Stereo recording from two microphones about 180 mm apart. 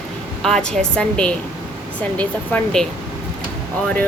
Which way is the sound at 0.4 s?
Centre (ahead or behind).